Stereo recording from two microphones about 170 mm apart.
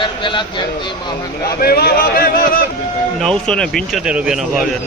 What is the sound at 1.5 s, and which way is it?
Speech, 65° left (ahead or behind).